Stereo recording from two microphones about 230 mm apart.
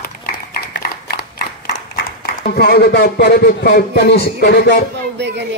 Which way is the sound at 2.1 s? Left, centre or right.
Left.